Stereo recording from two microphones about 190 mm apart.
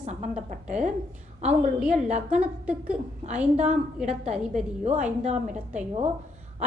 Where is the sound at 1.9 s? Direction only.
35° right (ahead or behind).